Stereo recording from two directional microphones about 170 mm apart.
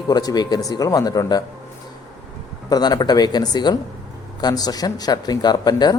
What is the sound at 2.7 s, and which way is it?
Speech, 25° left (ahead or behind).